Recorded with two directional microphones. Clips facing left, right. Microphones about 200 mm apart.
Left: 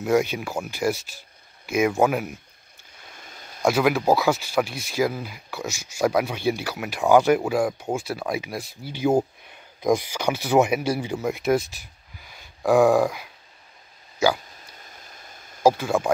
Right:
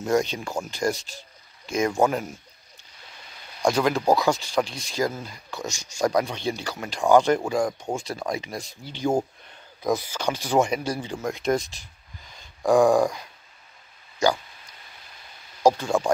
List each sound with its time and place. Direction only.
0.0 s speech: 5° left (ahead or behind)
3.6 s speech: 10° left (ahead or behind)
14.9 s a sound: 45° left (ahead or behind)
15.6 s speech: 5° left (ahead or behind)